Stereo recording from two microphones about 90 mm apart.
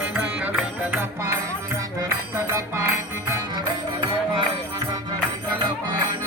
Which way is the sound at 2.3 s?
30° right (ahead or behind).